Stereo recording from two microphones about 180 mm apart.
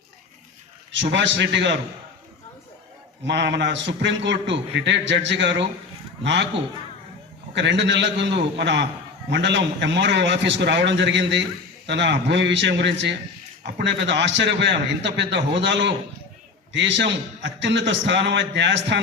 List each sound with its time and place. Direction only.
0.9 s a man's voice: 85° right
3.2 s a man's voice: 75° right (ahead or behind)
7.5 s a man's voice: 80° right
9.3 s a man's voice: 85° right